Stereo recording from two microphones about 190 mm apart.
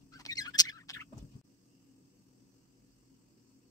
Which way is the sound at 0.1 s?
20° left (ahead or behind).